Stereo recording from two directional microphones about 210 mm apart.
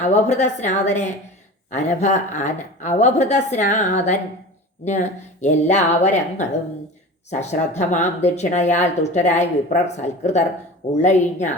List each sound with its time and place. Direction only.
0.0 s speech: 35° left (ahead or behind)